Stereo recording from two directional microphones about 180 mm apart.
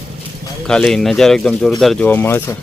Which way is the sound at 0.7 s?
5° left (ahead or behind).